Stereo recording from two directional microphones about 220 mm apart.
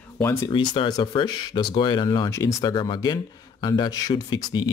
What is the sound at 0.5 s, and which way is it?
Speech, 20° left (ahead or behind).